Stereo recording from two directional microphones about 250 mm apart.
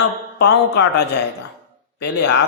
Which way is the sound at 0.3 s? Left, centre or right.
Left.